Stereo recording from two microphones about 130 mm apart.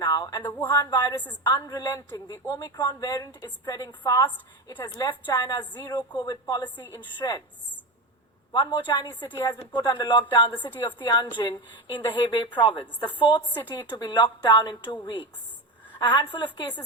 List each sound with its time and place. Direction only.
0.0 s a sound: 30° left (ahead or behind)
0.5 s a woman's voice: 15° left (ahead or behind)
0.8 s a woman's voice: 35° left (ahead or behind)
8.9 s a woman's voice: 35° left (ahead or behind)
13.5 s a woman's voice: 15° left (ahead or behind)
13.9 s a woman's voice: 30° left (ahead or behind)
16.0 s a woman's voice: 35° left (ahead or behind)